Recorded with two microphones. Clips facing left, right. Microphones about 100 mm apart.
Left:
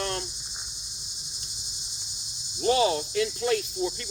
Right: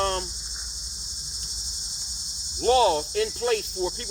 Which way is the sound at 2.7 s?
55° right (ahead or behind).